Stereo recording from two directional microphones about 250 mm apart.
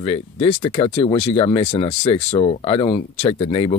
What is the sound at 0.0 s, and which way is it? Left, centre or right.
Speech, left.